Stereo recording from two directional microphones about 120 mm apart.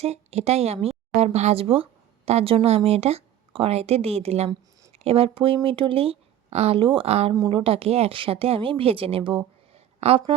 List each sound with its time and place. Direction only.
0.0 s speech: 60° right (ahead or behind)
6.8 s speech: 50° right (ahead or behind)
9.7 s a sound: 55° right (ahead or behind)